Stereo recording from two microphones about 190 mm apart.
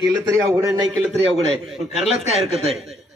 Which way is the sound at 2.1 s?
30° right (ahead or behind).